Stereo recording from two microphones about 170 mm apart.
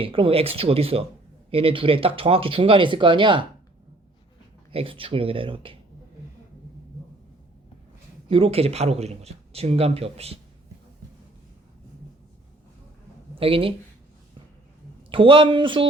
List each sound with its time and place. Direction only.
0.0 s speech: 35° right (ahead or behind)
4.7 s speech: 35° right (ahead or behind)
8.3 s speech: 35° right (ahead or behind)
13.4 s speech: 35° right (ahead or behind)
15.1 s speech: 30° right (ahead or behind)